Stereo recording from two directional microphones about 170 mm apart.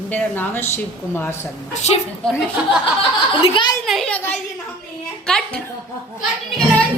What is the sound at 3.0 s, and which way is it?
Speech, 30° left (ahead or behind).